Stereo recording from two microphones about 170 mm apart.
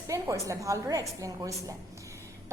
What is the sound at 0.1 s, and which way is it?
A woman's voice, 20° right (ahead or behind).